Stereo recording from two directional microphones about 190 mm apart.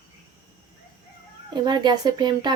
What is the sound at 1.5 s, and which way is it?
Speech, 20° right (ahead or behind).